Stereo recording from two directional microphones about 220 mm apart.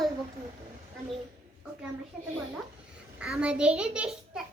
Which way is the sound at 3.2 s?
5° right (ahead or behind).